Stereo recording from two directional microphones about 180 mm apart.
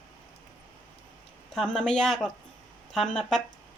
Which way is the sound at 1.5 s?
5° left (ahead or behind).